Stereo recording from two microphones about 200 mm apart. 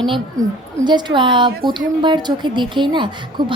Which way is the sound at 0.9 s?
20° right (ahead or behind).